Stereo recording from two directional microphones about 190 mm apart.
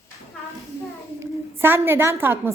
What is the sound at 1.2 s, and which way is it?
A woman's voice, 10° right (ahead or behind).